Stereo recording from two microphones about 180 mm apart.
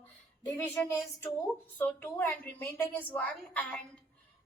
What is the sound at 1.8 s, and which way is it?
A woman's voice, 5° left (ahead or behind).